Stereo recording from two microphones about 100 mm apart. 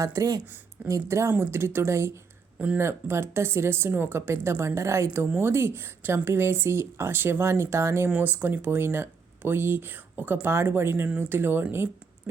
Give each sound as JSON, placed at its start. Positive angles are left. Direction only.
{"t": 0.0, "sound": "speech", "side_deg": -35}
{"t": 2.6, "sound": "speech", "side_deg": -15}
{"t": 2.8, "sound": "speech", "side_deg": -25}